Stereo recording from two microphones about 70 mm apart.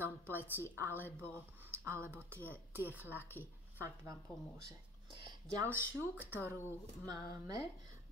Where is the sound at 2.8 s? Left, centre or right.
Right.